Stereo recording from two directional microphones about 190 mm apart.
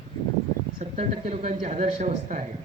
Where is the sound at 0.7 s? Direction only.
30° right (ahead or behind).